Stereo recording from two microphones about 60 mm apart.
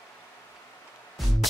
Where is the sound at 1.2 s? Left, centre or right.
Centre.